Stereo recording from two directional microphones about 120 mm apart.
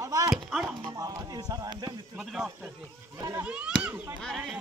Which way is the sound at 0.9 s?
30° right (ahead or behind).